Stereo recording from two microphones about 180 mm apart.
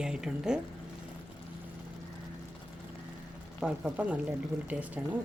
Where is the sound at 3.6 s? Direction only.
5° right (ahead or behind).